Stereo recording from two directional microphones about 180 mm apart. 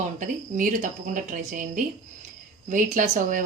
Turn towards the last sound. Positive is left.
turn(degrees=-45)  # may be behind; listen again after turning